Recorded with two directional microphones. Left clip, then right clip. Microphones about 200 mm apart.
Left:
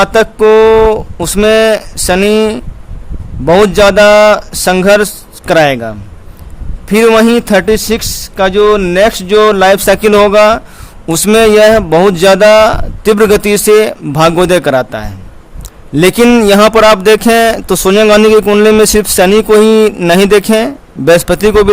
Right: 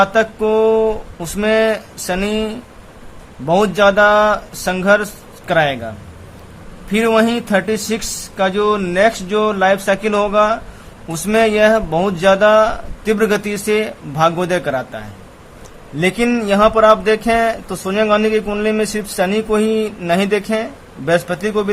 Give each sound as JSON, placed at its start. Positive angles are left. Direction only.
{"t": 0.0, "sound": "speech", "side_deg": 55}